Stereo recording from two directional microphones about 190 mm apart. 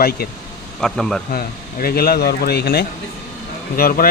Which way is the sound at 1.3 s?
50° left (ahead or behind).